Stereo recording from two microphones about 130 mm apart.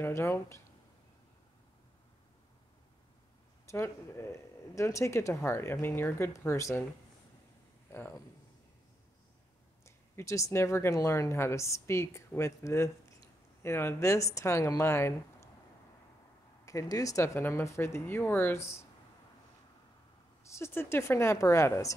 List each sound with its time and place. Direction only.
0.0 s speech: 20° left (ahead or behind)
3.6 s speech: 20° left (ahead or behind)
7.9 s speech: 15° left (ahead or behind)
9.8 s speech: 20° left (ahead or behind)
16.6 s speech: 25° left (ahead or behind)
20.4 s speech: 20° left (ahead or behind)